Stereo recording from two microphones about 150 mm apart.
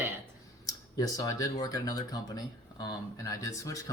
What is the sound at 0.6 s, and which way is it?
Speech, 25° left (ahead or behind).